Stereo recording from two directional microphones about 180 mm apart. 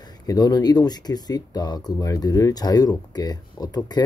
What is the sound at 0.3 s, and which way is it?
Speech, 20° left (ahead or behind).